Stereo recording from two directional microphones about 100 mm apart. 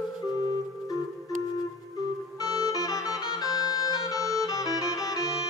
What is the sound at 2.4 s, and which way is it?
Music, 40° left (ahead or behind).